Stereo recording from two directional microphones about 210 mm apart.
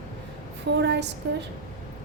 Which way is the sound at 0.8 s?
55° right (ahead or behind).